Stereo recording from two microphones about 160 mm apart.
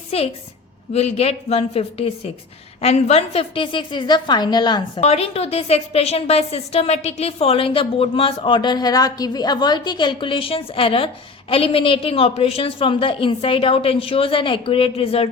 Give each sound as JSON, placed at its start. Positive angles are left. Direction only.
{"t": 0.1, "sound": "a woman's voice", "side_deg": 40}
{"t": 4.9, "sound": "a woman's voice", "side_deg": 40}